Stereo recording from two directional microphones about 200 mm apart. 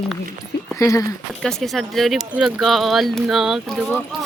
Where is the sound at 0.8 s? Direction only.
15° left (ahead or behind).